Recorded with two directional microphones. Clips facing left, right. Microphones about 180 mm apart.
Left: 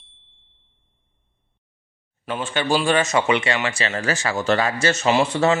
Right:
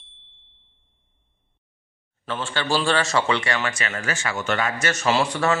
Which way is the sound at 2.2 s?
15° left (ahead or behind).